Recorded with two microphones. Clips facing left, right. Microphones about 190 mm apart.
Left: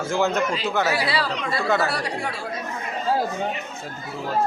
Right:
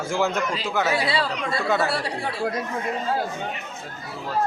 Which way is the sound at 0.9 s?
25° right (ahead or behind).